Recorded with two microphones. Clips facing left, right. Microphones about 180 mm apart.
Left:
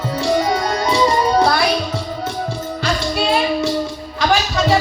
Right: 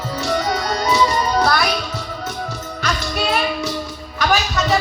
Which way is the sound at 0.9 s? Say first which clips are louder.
Left 4 dB; 25° left (ahead or behind).